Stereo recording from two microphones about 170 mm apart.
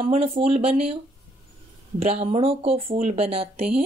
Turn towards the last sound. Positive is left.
turn(degrees=-35)  # may be behind; listen again after turning